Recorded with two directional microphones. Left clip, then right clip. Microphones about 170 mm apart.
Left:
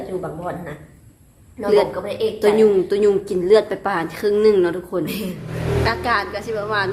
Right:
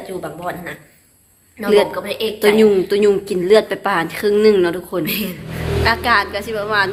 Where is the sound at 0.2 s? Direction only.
20° left (ahead or behind).